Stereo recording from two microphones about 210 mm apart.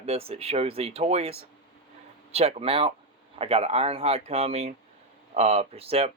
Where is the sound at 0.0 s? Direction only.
30° right (ahead or behind).